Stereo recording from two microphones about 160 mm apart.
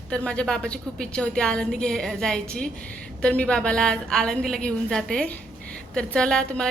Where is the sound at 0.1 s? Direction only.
5° left (ahead or behind).